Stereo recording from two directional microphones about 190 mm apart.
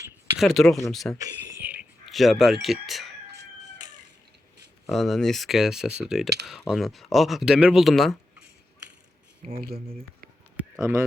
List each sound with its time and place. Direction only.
0.3 s speech: centre (ahead or behind)
4.9 s speech: centre (ahead or behind)
10.6 s a sound: 10° right (ahead or behind)